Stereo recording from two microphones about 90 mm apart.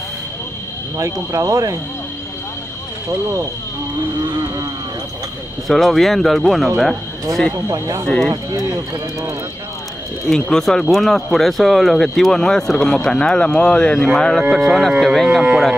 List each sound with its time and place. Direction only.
0.9 s speech: 35° right (ahead or behind)
5.7 s speech: centre (ahead or behind)
7.5 s speech: 35° right (ahead or behind)
10.2 s speech: 5° left (ahead or behind)
14.5 s speech: 5° right (ahead or behind)